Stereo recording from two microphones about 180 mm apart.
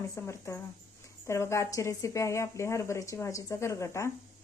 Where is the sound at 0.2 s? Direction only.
15° left (ahead or behind).